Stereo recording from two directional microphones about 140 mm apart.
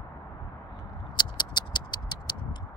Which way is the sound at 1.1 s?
30° left (ahead or behind).